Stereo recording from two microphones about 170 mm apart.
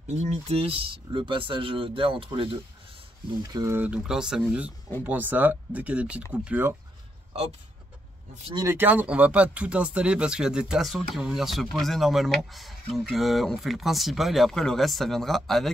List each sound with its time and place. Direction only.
0.1 s speech: 40° right (ahead or behind)
3.4 s speech: 20° right (ahead or behind)
8.6 s speech: 10° right (ahead or behind)